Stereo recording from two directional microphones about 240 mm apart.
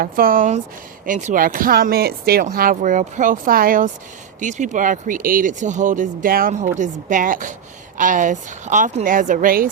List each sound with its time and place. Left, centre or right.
0.0 s speech: right